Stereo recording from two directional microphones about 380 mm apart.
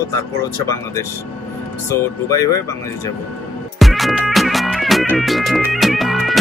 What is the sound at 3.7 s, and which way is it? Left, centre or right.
Music, centre.